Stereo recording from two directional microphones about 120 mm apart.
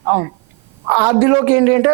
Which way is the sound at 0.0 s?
30° right (ahead or behind).